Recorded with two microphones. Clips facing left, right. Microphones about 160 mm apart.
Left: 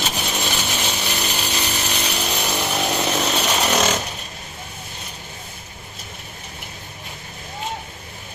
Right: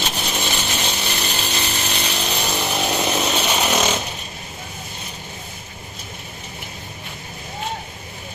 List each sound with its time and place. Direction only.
0.0 s chainsaw: centre (ahead or behind)
2.6 s chainsaw: 10° right (ahead or behind)